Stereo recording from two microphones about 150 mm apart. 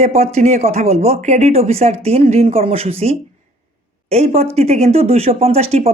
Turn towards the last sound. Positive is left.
turn(degrees=-40)  # may be behind; listen again after turning